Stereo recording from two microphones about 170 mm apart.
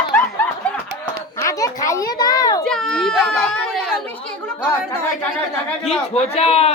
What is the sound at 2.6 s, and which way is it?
Children playing, 5° left (ahead or behind).